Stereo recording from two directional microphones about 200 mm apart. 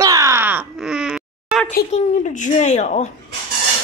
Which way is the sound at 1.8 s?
40° left (ahead or behind).